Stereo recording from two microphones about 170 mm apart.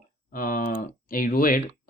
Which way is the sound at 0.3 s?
55° left (ahead or behind).